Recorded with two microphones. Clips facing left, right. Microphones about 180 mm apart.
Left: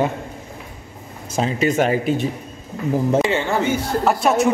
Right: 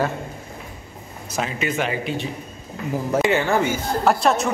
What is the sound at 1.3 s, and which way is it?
Speech, 35° left (ahead or behind).